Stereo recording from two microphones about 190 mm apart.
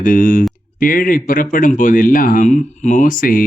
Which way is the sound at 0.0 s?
45° left (ahead or behind).